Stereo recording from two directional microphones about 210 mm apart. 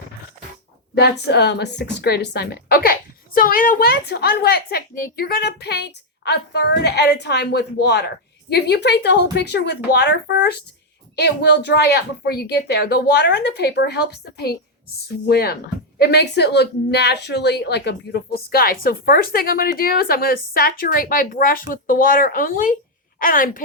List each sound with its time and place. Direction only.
0.9 s a woman's voice: 50° left (ahead or behind)